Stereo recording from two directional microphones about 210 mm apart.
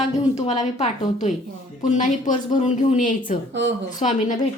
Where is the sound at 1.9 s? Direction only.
35° left (ahead or behind).